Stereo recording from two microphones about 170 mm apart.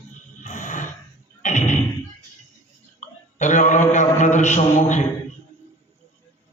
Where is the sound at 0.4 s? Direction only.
50° left (ahead or behind).